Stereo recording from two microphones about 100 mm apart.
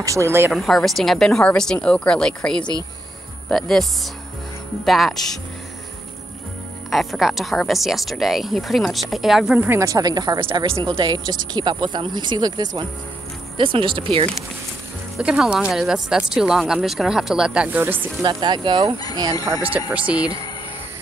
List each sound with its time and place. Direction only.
0.0 s speech: 30° right (ahead or behind)
0.5 s a woman's voice: centre (ahead or behind)
6.9 s speech: centre (ahead or behind)
9.6 s speech: 20° right (ahead or behind)
9.8 s speech: 40° right (ahead or behind)
13.6 s speech: 60° right (ahead or behind)
15.1 s speech: 5° right (ahead or behind)
17.7 s speech: 20° right (ahead or behind)
18.2 s speech: 50° right (ahead or behind)
19.9 s speech: 10° right (ahead or behind)